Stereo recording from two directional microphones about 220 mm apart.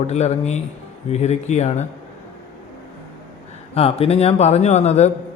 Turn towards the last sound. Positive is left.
turn(degrees=30)  # may be behind; listen again after turning